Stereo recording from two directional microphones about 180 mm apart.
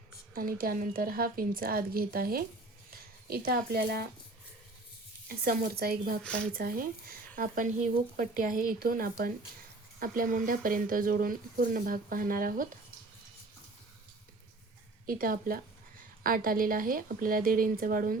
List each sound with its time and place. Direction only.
0.3 s speech: 55° right (ahead or behind)
5.3 s speech: 55° right (ahead or behind)
6.2 s speech: 5° left (ahead or behind)
6.5 s speech: 55° right (ahead or behind)
15.0 s speech: 55° right (ahead or behind)